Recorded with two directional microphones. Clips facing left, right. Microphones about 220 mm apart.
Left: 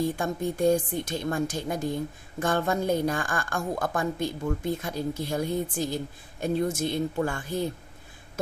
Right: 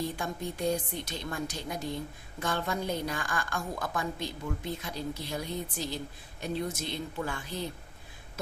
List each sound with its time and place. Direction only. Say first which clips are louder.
0.0 s a woman's voice: left 7 dB; 50° left (ahead or behind)